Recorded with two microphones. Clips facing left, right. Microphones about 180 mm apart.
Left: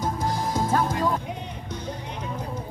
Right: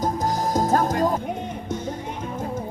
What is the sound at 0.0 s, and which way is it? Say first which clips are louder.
Music: right 3 dB; 45° right (ahead or behind).